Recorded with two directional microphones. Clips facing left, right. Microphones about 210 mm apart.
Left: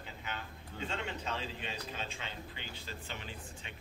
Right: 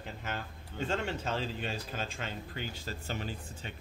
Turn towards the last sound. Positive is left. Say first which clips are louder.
# right 6 dB
turn(degrees=-40)  # may be behind; listen again after turning